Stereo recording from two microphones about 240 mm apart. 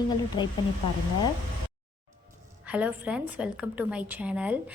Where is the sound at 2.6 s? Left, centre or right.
Centre.